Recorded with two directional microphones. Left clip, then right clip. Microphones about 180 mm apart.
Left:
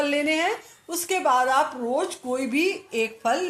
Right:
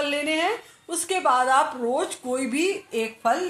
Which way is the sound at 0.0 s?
10° left (ahead or behind).